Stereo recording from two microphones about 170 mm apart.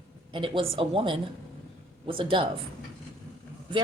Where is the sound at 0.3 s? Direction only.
30° right (ahead or behind).